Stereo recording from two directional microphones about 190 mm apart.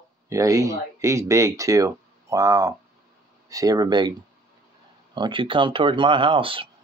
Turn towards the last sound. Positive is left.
turn(degrees=-30)  # may be behind; listen again after turning